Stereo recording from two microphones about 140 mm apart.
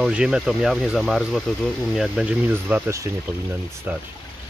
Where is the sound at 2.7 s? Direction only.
20° right (ahead or behind).